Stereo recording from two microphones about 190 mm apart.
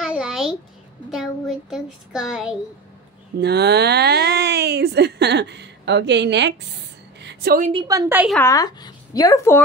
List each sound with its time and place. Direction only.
0.0 s a sound: 5° right (ahead or behind)
1.1 s a child's voice: centre (ahead or behind)
3.3 s speech: 60° right (ahead or behind)
7.2 s a sound: 65° right (ahead or behind)
7.7 s a woman's voice: 20° right (ahead or behind)
8.4 s speech: 15° left (ahead or behind)